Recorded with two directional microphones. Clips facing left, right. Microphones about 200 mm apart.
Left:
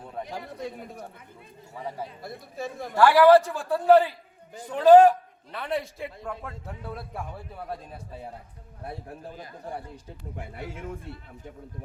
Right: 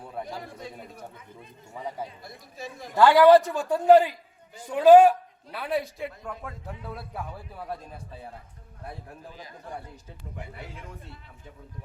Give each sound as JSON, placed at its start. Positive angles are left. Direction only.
{"t": 2.2, "sound": "speech", "side_deg": 55}
{"t": 2.9, "sound": "a man's voice", "side_deg": -15}
{"t": 10.3, "sound": "a man's voice", "side_deg": 50}